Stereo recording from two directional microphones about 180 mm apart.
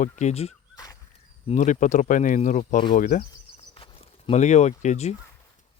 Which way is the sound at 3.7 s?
30° left (ahead or behind).